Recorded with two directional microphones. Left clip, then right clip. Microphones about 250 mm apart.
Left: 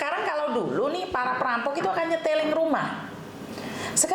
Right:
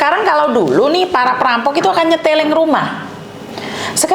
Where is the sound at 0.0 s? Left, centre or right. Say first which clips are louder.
Right 15 dB; right.